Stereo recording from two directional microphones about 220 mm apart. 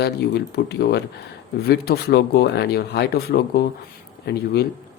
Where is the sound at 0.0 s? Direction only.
45° left (ahead or behind).